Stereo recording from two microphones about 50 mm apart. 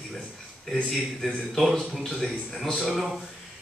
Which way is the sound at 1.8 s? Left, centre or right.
Centre.